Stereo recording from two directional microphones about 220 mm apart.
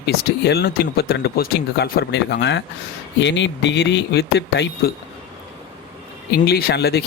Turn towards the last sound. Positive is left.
turn(degrees=45)  # may be behind; listen again after turning